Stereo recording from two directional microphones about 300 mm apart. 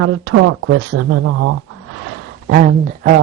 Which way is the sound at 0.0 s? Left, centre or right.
Right.